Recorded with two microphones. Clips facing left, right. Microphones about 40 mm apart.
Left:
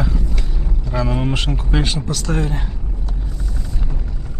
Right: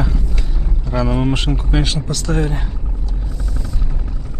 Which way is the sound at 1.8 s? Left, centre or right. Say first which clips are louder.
Right 1 dB; centre.